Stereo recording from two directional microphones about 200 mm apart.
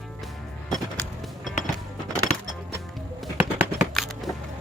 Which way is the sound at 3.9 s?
Centre (ahead or behind).